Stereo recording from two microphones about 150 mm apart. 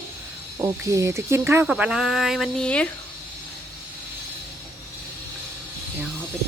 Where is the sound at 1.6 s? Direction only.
5° right (ahead or behind).